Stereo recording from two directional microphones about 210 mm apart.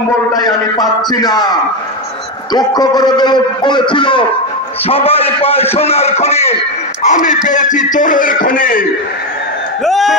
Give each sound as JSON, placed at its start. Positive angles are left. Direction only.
{"t": 0.7, "sound": "a man's voice", "side_deg": 20}
{"t": 2.5, "sound": "a man's voice", "side_deg": 20}
{"t": 9.8, "sound": "a sound", "side_deg": 0}